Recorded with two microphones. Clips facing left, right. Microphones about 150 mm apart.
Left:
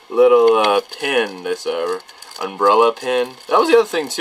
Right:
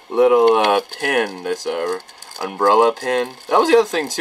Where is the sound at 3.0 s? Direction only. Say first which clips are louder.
Left 2 dB; 15° left (ahead or behind).